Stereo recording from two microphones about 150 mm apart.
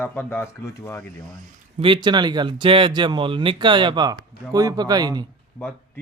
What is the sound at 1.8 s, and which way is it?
Speech, 30° right (ahead or behind).